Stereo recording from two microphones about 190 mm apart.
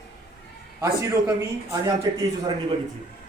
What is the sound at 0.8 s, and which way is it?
A man's voice, 15° right (ahead or behind).